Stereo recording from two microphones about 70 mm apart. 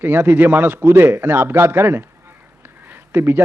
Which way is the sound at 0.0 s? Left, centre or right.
Right.